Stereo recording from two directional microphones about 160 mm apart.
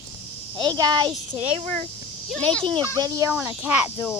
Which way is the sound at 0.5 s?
25° right (ahead or behind).